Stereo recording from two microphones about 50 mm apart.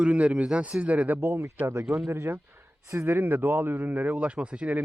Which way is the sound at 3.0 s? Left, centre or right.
Right.